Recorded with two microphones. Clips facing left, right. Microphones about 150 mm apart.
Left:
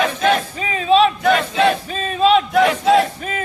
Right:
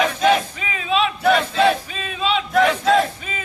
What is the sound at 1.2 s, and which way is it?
Battle cry, 5° right (ahead or behind).